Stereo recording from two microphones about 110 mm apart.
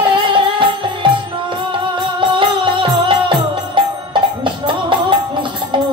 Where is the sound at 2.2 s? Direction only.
45° right (ahead or behind).